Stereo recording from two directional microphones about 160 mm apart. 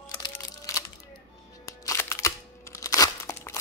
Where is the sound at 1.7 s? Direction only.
20° left (ahead or behind).